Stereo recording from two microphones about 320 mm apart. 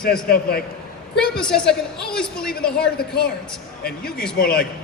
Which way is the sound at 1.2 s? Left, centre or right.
Centre.